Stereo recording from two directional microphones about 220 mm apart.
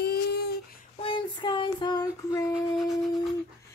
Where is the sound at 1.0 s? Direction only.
20° left (ahead or behind).